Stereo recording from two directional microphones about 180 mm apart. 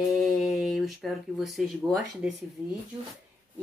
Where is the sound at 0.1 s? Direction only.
Centre (ahead or behind).